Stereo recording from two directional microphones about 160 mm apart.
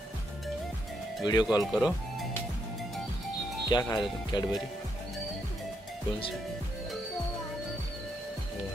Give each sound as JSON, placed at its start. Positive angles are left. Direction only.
{"t": 1.2, "sound": "speech", "side_deg": 25}
{"t": 1.6, "sound": "speech", "side_deg": 0}
{"t": 3.6, "sound": "speech", "side_deg": 25}